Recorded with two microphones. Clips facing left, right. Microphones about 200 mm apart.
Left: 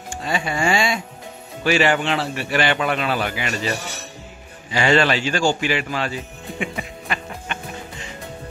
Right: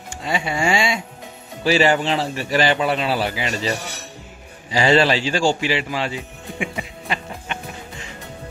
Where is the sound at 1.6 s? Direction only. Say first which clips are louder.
Right 1 dB; 35° right (ahead or behind).